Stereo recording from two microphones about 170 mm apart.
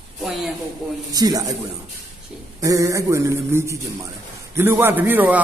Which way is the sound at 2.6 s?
20° right (ahead or behind).